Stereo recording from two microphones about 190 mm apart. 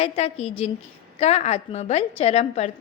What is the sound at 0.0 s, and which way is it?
A woman's voice, 35° left (ahead or behind).